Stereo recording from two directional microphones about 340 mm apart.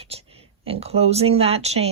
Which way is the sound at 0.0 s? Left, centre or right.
Centre.